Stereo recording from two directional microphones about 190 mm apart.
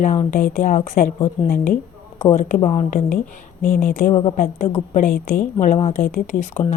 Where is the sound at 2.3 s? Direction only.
40° left (ahead or behind).